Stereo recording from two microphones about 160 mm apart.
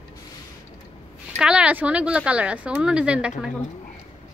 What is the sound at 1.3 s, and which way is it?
Speech, 5° right (ahead or behind).